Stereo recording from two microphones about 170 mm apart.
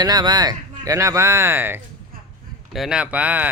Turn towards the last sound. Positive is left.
turn(degrees=-10)  # may be behind; listen again after turning